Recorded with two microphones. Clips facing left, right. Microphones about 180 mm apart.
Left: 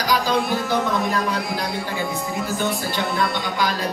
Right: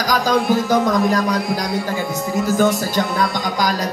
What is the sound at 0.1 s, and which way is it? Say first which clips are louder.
Speech: right 4 dB; 45° right (ahead or behind).